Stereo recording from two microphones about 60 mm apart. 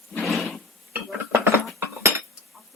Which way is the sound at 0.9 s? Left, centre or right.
Right.